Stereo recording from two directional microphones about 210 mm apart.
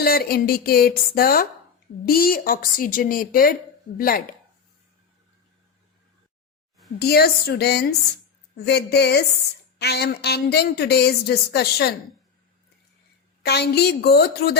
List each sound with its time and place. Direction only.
0.0 s a woman's voice: 45° left (ahead or behind)
7.0 s a woman's voice: 50° left (ahead or behind)
13.4 s a woman's voice: 50° left (ahead or behind)